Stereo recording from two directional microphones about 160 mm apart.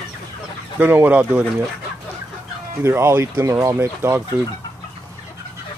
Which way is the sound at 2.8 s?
15° right (ahead or behind).